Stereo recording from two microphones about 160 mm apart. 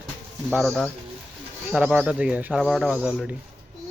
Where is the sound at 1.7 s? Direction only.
10° right (ahead or behind).